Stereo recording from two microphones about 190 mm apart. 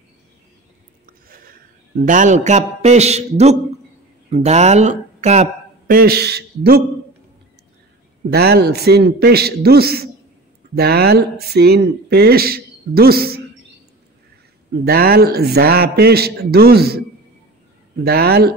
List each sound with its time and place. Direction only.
1.3 s speech: 50° right (ahead or behind)
5.9 s speech: 55° right (ahead or behind)
8.3 s speech: 55° right (ahead or behind)
14.9 s speech: 55° right (ahead or behind)
18.0 s speech: 55° right (ahead or behind)